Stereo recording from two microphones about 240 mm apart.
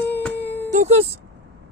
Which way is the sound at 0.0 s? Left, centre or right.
Centre.